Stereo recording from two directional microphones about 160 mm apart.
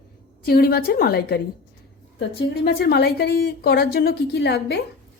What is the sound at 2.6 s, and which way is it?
A woman's voice, 80° left.